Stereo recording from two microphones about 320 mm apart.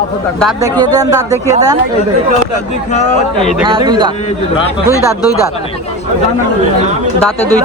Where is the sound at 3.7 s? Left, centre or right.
Centre.